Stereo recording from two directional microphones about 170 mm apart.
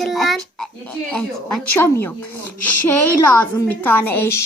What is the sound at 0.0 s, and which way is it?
A child's voice, centre (ahead or behind).